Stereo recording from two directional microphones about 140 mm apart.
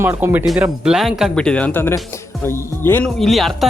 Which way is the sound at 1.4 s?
10° left (ahead or behind).